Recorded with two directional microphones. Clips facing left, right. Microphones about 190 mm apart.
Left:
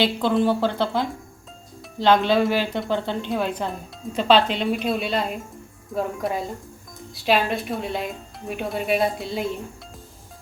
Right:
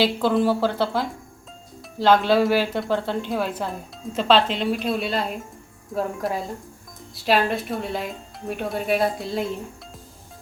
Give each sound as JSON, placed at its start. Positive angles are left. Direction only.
{"t": 0.0, "sound": "speech", "side_deg": -5}